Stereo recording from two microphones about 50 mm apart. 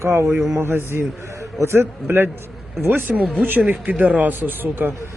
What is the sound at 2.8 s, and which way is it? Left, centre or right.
Speech, right.